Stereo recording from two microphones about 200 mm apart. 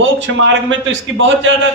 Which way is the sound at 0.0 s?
70° right (ahead or behind).